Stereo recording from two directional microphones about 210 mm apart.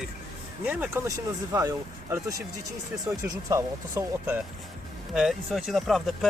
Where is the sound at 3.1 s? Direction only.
15° right (ahead or behind).